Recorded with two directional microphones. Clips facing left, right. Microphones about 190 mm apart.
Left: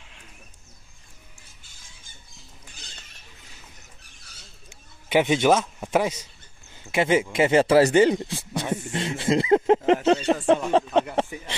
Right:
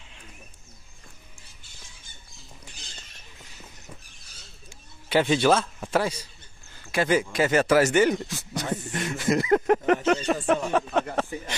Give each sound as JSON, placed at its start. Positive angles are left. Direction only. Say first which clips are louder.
{"t": 5.1, "sound": "a man's voice", "louder": "left 1 dB", "side_deg": 15}
{"t": 8.6, "sound": "a sound", "louder": "left 2 dB", "side_deg": 25}
{"t": 10.0, "sound": "speech", "louder": "left 3 dB", "side_deg": 25}